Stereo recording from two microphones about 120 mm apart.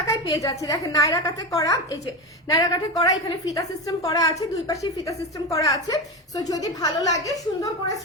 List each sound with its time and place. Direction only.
0.1 s a woman's voice: 25° left (ahead or behind)